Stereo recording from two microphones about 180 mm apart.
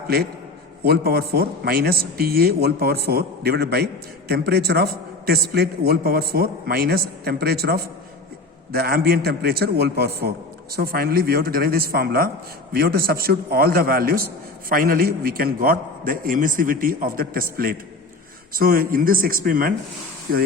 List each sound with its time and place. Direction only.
0.9 s a man's voice: 60° right (ahead or behind)